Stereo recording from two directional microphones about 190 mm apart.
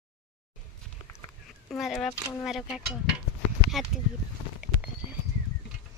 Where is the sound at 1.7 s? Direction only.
Centre (ahead or behind).